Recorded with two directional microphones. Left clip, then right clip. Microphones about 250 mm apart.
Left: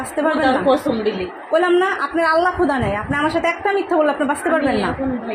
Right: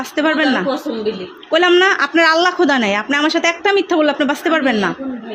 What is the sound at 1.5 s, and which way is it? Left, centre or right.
A woman's voice, right.